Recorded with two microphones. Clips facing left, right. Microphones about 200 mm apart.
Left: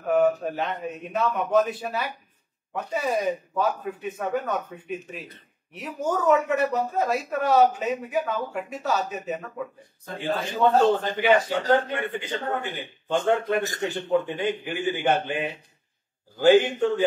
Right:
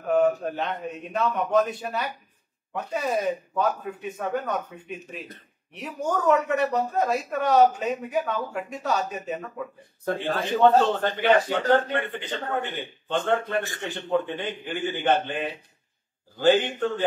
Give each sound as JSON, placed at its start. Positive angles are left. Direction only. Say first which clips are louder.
{"t": 0.1, "sound": "speech", "louder": "even", "side_deg": 5}
{"t": 10.0, "sound": "a man's voice", "louder": "right 2 dB", "side_deg": -60}
{"t": 11.7, "sound": "a man's voice", "louder": "even", "side_deg": 10}